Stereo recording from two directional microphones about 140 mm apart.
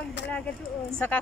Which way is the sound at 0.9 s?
10° left (ahead or behind).